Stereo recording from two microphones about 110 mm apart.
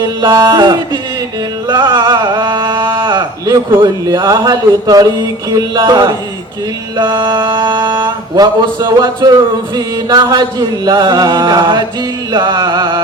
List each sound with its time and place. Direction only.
0.0 s music: 40° right (ahead or behind)
1.6 s a sound: 45° right (ahead or behind)
3.7 s speech: 50° right (ahead or behind)
4.1 s music: 35° right (ahead or behind)